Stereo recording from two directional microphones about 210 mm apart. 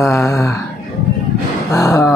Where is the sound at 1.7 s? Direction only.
15° left (ahead or behind).